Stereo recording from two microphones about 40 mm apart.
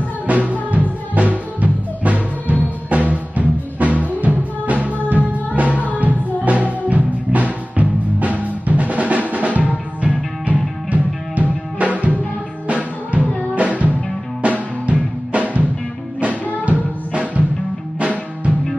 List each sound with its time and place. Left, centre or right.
0.3 s music: right
16.6 s music: right